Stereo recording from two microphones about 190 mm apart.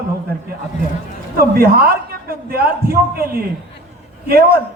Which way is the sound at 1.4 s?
50° right (ahead or behind).